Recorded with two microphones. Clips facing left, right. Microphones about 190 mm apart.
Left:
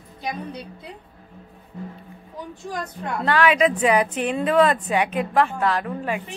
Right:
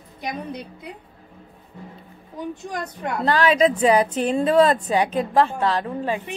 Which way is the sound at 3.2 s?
35° right (ahead or behind).